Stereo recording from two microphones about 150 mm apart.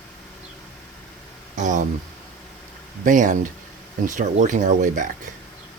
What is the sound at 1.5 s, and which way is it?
Speech, 55° right (ahead or behind).